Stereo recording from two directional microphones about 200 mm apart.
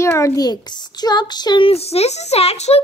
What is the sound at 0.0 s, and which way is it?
A child's voice, 15° left (ahead or behind).